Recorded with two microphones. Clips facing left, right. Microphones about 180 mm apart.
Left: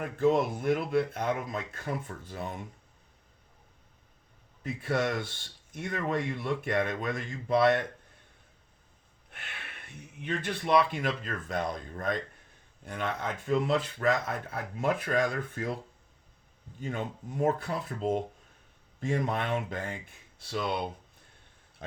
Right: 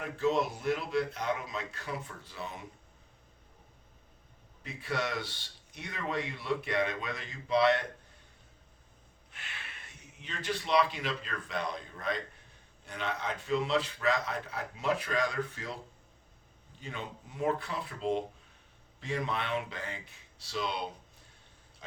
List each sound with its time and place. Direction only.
0.0 s a man's voice: 50° left (ahead or behind)
4.6 s a man's voice: 50° left (ahead or behind)
9.3 s a man's voice: 55° left (ahead or behind)
16.8 s a man's voice: 45° left (ahead or behind)
21.8 s a sound: 55° left (ahead or behind)